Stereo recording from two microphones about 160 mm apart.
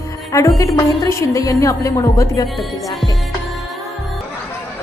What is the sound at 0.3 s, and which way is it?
Speech, 20° left (ahead or behind).